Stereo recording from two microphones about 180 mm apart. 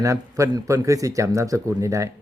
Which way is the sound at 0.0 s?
15° right (ahead or behind).